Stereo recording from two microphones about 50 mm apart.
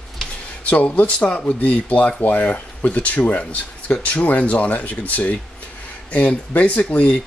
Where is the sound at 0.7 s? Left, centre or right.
Left.